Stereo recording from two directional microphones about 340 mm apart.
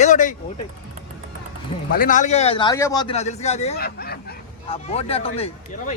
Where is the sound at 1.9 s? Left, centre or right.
Left.